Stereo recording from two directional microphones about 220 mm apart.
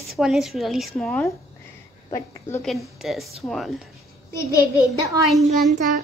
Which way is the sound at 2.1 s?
15° left (ahead or behind).